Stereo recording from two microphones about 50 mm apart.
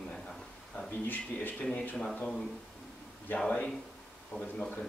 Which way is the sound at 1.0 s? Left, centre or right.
Left.